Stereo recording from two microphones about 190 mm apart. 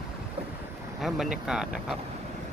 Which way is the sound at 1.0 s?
Centre (ahead or behind).